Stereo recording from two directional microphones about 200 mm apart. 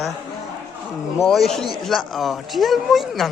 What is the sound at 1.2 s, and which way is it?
Speech, centre (ahead or behind).